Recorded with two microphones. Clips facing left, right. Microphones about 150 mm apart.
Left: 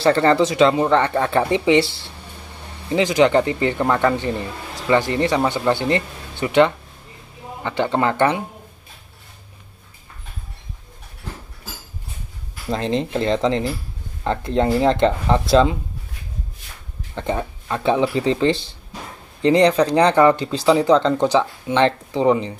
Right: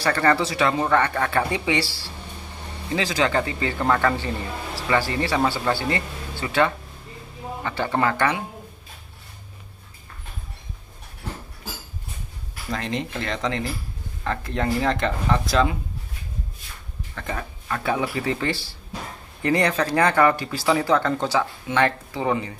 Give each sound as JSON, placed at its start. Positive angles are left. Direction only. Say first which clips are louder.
{"t": 0.0, "sound": "speech", "louder": "left 6 dB", "side_deg": 25}
{"t": 12.6, "sound": "speech", "louder": "left 6 dB", "side_deg": 30}
{"t": 17.1, "sound": "speech", "louder": "left 8 dB", "side_deg": 25}